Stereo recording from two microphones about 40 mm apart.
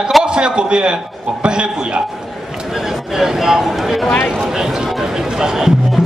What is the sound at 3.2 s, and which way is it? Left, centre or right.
Speech, centre.